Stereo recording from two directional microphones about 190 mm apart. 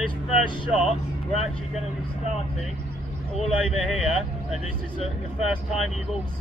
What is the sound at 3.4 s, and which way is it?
Speech, centre (ahead or behind).